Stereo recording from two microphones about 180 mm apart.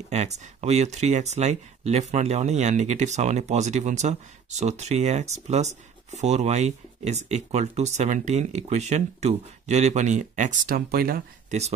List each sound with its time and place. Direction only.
0.1 s speech: 40° right (ahead or behind); by 11.2 s 55° right (ahead or behind)